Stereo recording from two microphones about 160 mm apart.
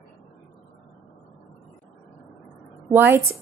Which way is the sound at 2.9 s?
10° right (ahead or behind).